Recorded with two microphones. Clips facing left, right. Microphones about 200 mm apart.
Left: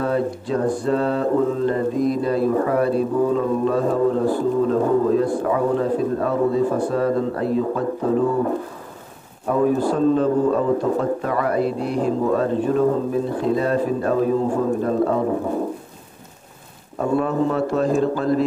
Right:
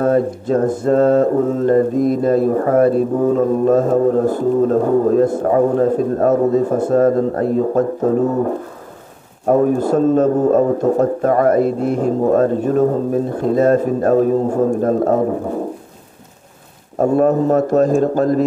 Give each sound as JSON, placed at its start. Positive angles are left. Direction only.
{"t": 0.0, "sound": "speech", "side_deg": -45}
{"t": 9.5, "sound": "speech", "side_deg": -45}
{"t": 17.0, "sound": "speech", "side_deg": -45}